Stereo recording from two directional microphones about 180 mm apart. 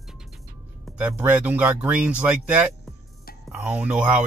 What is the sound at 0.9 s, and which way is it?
Speech, 10° right (ahead or behind).